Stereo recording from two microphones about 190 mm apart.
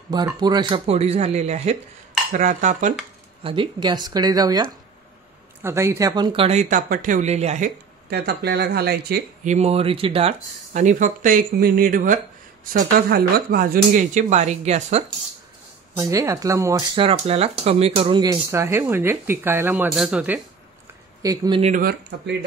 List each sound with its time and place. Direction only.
0.1 s speech: 20° right (ahead or behind); by 2.9 s 40° right (ahead or behind)
3.4 s speech: 25° right (ahead or behind)
8.1 s speech: 60° right (ahead or behind)
9.4 s speech: 35° right (ahead or behind)
16.0 s speech: 15° right (ahead or behind)
17.0 s speech: 30° right (ahead or behind); by 20.3 s 5° right (ahead or behind)
21.2 s speech: 20° right (ahead or behind)
21.5 s speech: 35° right (ahead or behind)